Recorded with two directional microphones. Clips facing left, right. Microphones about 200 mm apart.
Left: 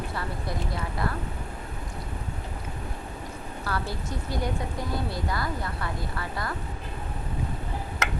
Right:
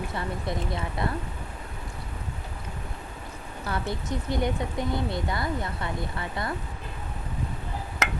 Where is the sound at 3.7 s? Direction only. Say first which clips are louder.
Right 2 dB; 20° right (ahead or behind).